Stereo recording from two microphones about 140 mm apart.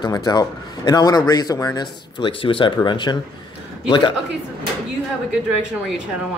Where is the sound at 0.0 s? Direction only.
30° left (ahead or behind).